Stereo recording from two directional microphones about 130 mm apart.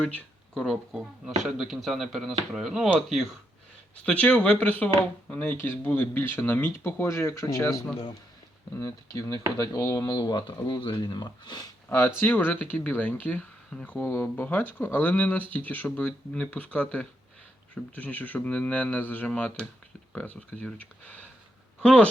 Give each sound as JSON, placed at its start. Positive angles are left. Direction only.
{"t": 0.0, "sound": "speech", "side_deg": 5}
{"t": 4.0, "sound": "speech", "side_deg": 10}
{"t": 11.9, "sound": "speech", "side_deg": 20}